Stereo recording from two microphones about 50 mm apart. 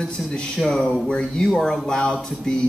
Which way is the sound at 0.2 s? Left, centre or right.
Centre.